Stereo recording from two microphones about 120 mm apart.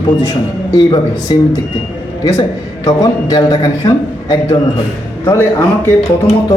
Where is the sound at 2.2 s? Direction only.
30° left (ahead or behind).